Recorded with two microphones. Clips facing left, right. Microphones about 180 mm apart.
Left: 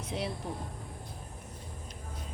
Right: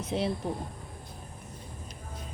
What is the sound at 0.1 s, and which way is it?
Speech, 30° right (ahead or behind).